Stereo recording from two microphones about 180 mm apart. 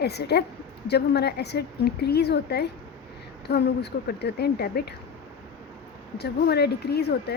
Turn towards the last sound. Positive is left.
turn(degrees=65)  # may be behind; listen again after turning